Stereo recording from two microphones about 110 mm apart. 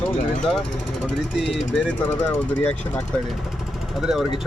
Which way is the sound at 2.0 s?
20° left (ahead or behind).